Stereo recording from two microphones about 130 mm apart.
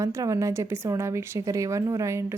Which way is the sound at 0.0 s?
25° right (ahead or behind).